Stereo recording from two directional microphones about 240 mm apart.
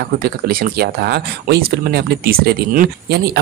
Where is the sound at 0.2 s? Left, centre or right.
Right.